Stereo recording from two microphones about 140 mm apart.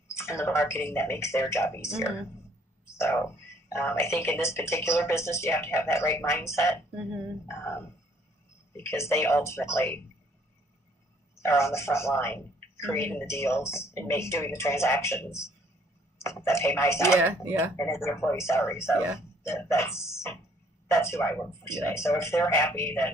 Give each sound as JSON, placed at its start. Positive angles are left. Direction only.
{"t": 0.1, "sound": "a woman's voice", "side_deg": 20}
{"t": 2.8, "sound": "a sound", "side_deg": 20}
{"t": 3.7, "sound": "a woman's voice", "side_deg": 15}
{"t": 11.4, "sound": "a woman's voice", "side_deg": 20}
{"t": 17.2, "sound": "speech", "side_deg": -15}
{"t": 17.7, "sound": "a woman's voice", "side_deg": 20}